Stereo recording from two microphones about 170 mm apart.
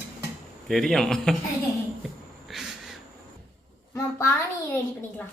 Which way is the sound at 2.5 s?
Centre (ahead or behind).